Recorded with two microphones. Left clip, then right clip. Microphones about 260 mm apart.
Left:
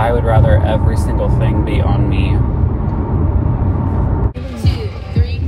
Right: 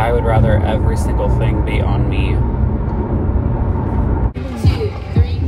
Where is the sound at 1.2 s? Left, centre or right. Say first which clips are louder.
Left 2 dB; left.